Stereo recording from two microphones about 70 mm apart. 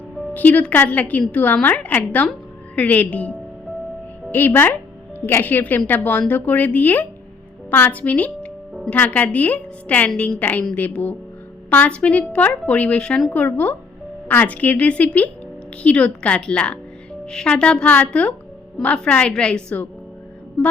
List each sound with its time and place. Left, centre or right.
0.3 s a woman's voice: left
13.3 s a woman's voice: left